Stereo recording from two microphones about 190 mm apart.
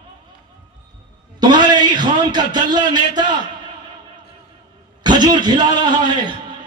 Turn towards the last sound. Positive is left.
turn(degrees=-25)  # may be behind; listen again after turning